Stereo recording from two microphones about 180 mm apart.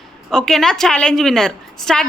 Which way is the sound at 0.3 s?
Centre (ahead or behind).